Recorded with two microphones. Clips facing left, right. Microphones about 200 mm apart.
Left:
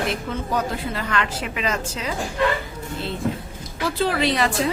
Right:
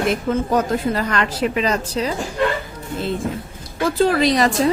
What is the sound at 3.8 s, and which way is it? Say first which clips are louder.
Speech: right 5 dB; 40° right (ahead or behind).